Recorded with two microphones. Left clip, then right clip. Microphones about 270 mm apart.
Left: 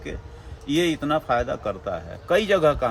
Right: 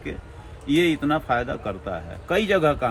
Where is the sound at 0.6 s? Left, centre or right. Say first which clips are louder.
Right 2 dB; left.